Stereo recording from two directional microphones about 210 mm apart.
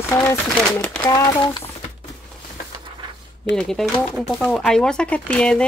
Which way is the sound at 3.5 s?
Centre (ahead or behind).